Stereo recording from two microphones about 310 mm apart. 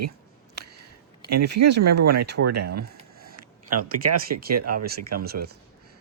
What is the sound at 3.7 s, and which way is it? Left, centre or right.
Speech, right.